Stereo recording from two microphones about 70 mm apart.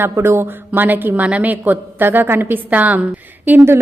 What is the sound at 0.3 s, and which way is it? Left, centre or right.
A woman's voice, right.